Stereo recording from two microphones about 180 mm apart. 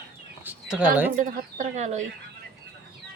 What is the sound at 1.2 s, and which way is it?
Speech, 45° right (ahead or behind).